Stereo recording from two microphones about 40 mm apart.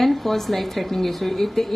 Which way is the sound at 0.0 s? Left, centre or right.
Centre.